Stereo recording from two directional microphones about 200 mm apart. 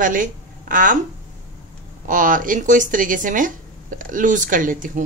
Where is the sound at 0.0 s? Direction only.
40° right (ahead or behind).